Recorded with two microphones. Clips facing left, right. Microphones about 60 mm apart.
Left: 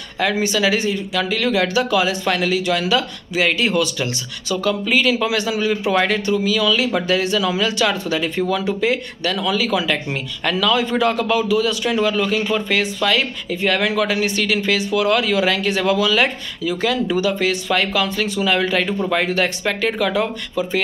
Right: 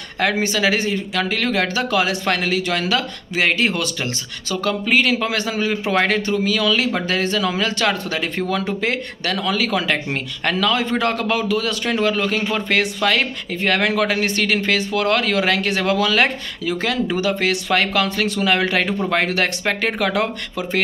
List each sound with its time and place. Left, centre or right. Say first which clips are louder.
0.2 s speech: even; right
5.7 s a man's voice: left 1 dB; right
15.8 s speech: left 1 dB; right
19.6 s speech: left 1 dB; right